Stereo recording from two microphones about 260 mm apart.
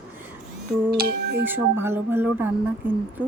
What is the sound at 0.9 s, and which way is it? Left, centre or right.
Speech, right.